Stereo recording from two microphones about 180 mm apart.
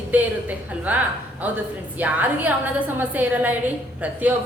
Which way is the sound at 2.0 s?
10° right (ahead or behind).